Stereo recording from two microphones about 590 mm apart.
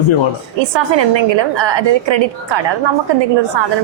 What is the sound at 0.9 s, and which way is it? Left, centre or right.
A woman's voice, right.